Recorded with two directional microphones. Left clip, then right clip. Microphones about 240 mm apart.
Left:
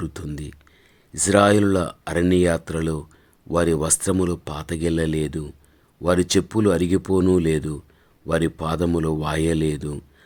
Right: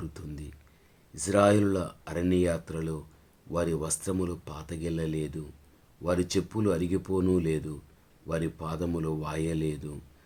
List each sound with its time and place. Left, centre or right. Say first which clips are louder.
0.0 s speech: left 10 dB; left